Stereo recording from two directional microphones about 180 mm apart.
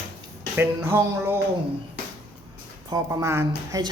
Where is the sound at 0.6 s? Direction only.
15° right (ahead or behind).